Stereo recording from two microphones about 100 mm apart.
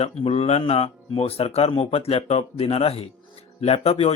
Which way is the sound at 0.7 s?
70° left (ahead or behind).